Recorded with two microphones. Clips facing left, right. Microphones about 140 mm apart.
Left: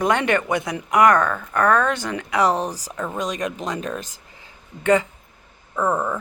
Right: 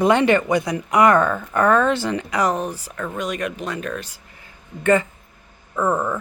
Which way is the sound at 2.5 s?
35° left (ahead or behind).